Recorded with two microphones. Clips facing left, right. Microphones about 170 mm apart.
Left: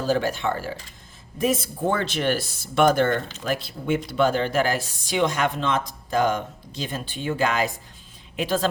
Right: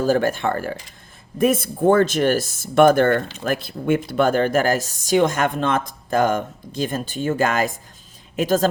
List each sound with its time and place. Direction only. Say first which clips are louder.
0.0 s speech: right 4 dB; 50° right (ahead or behind)